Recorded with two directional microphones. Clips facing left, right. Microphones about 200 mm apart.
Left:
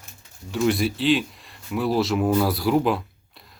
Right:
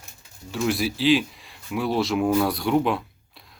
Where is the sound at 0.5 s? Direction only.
Centre (ahead or behind).